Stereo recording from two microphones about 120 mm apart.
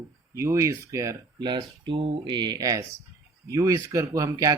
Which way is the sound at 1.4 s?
40° right (ahead or behind).